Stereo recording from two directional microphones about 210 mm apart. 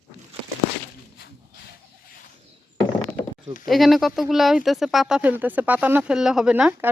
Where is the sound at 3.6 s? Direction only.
Centre (ahead or behind).